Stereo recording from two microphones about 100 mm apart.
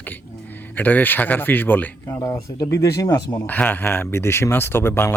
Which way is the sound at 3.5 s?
15° left (ahead or behind).